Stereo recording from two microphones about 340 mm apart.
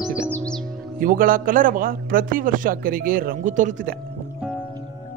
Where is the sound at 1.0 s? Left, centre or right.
Right.